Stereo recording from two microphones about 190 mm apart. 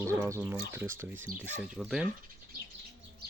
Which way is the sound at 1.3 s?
5° left (ahead or behind).